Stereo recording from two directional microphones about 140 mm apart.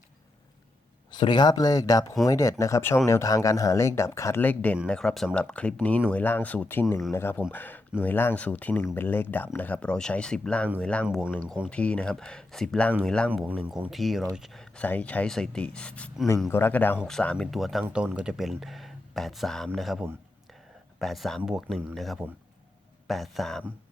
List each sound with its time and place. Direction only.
1.1 s speech: 30° left (ahead or behind); by 11.0 s 5° left (ahead or behind)
11.0 s speech: 5° right (ahead or behind)
11.3 s speech: 10° left (ahead or behind)
13.3 s speech: 10° right (ahead or behind)